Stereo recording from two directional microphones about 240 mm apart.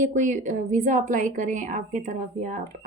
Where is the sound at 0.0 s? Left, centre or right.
Right.